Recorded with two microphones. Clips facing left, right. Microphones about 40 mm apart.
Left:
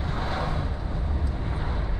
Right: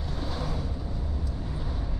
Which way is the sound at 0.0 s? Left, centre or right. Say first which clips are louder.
Left 5 dB; left.